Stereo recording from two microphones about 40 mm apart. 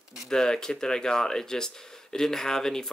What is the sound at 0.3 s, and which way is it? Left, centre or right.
Speech, centre.